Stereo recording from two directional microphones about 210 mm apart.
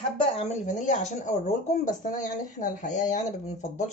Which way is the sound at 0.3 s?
30° left (ahead or behind).